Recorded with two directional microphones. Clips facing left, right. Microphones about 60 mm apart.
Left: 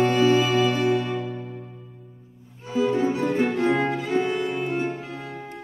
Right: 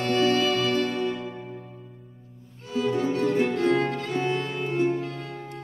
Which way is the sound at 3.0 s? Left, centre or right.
Centre.